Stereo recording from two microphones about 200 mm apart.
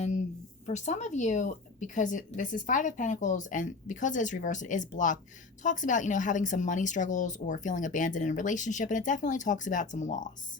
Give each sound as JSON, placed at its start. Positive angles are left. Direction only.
{"t": 0.6, "sound": "a woman's voice", "side_deg": 35}